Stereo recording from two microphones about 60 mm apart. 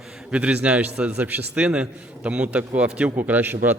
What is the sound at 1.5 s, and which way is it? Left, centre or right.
A man's voice, centre.